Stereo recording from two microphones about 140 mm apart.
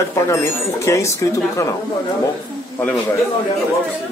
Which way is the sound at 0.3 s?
20° left (ahead or behind).